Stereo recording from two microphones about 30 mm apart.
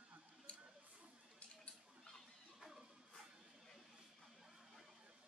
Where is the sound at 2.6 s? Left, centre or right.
Centre.